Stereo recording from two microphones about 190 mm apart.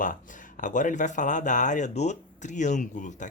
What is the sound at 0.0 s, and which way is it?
Speech, 45° left (ahead or behind).